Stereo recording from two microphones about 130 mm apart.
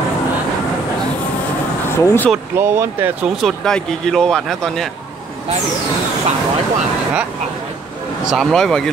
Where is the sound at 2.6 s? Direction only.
20° right (ahead or behind).